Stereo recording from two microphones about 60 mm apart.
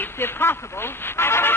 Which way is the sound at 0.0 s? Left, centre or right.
Left.